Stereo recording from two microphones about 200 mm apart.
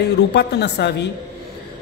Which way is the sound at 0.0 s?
55° left (ahead or behind).